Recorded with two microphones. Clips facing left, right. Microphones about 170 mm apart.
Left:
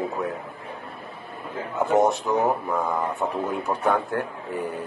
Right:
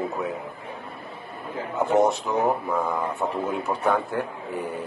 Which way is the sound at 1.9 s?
15° left (ahead or behind).